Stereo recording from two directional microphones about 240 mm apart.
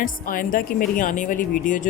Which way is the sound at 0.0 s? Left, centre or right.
Left.